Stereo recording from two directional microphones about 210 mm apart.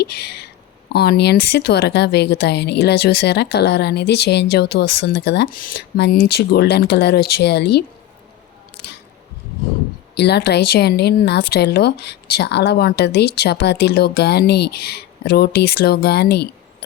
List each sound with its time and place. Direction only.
0.0 s speech: 50° left (ahead or behind)
10.2 s speech: 50° left (ahead or behind)